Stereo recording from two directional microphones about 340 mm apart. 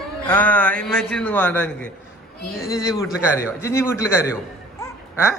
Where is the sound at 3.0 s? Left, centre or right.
Centre.